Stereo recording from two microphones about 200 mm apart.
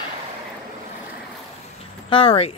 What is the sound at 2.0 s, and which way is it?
Speech, 25° left (ahead or behind).